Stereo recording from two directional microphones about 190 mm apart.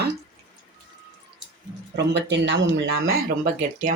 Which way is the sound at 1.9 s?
65° right (ahead or behind).